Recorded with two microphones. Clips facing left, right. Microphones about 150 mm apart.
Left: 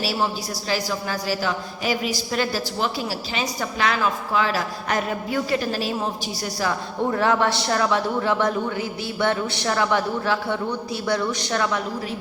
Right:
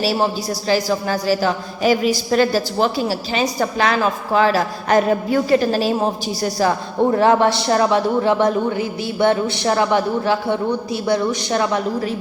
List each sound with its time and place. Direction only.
0.0 s a woman's voice: 35° right (ahead or behind)
7.0 s a man's voice: 25° right (ahead or behind)